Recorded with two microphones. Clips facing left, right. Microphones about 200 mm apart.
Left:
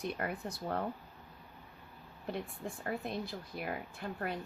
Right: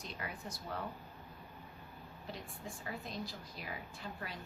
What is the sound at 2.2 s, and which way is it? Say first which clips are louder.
Speech: left 8 dB; 55° left (ahead or behind).